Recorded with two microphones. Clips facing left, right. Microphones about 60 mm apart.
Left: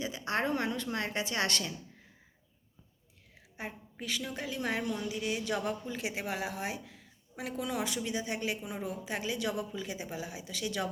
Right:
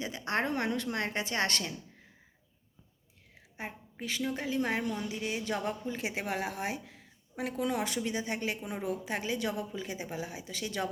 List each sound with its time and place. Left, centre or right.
0.0 s speech: right
3.6 s a sound: centre
4.3 s a woman's voice: right